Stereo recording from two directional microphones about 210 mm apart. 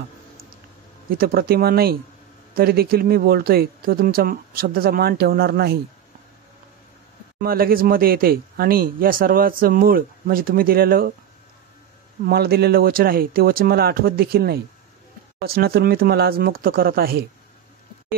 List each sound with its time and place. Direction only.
1.1 s speech: 45° right (ahead or behind)
7.4 s speech: 45° right (ahead or behind)
12.3 s speech: 50° right (ahead or behind)